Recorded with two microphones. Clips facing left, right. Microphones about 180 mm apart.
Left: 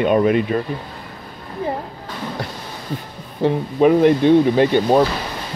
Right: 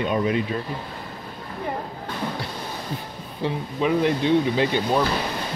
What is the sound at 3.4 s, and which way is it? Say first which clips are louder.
Speech: left 9 dB; 50° left (ahead or behind).